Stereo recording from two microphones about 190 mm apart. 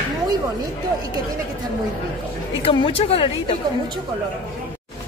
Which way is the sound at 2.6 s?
30° left (ahead or behind).